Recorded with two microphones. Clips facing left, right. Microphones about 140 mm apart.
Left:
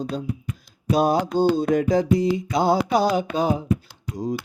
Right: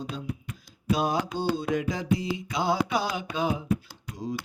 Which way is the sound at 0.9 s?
40° left (ahead or behind).